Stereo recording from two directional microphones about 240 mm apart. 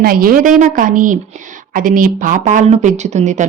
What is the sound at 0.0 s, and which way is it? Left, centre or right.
Speech, right.